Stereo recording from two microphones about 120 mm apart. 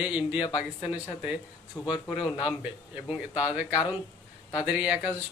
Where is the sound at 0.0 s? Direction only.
10° right (ahead or behind).